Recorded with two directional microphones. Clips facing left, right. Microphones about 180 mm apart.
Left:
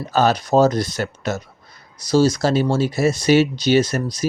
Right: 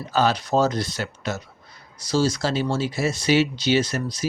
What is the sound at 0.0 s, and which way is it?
Speech, 45° left (ahead or behind).